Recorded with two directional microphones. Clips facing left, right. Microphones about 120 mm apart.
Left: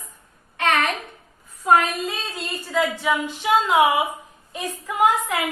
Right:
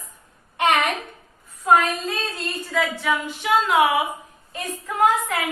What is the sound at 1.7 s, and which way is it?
Child singing, centre (ahead or behind).